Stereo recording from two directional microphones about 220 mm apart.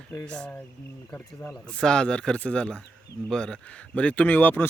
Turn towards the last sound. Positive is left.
turn(degrees=10)  # may be behind; listen again after turning